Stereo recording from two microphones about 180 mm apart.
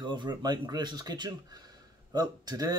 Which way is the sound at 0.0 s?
25° right (ahead or behind).